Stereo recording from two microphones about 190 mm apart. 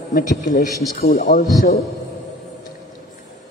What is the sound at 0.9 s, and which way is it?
Speech, 55° left (ahead or behind).